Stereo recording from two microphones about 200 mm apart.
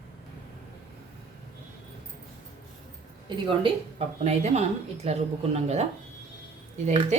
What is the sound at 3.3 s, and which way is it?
Speech, 25° right (ahead or behind).